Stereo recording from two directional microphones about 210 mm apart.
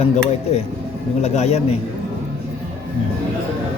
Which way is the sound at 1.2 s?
30° left (ahead or behind).